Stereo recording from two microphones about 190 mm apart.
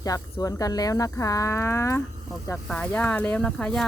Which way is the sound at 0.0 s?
15° left (ahead or behind).